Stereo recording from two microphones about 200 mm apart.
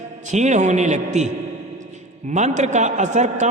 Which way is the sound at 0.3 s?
35° right (ahead or behind).